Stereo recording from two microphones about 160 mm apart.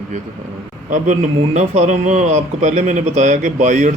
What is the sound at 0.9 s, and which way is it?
A man's voice, 50° right (ahead or behind).